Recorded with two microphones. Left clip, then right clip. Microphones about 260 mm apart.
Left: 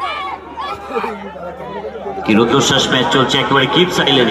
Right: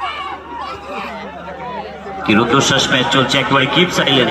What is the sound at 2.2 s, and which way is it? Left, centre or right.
A man's voice, centre.